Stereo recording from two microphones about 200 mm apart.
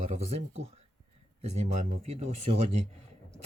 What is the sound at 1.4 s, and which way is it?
Speech, 35° right (ahead or behind).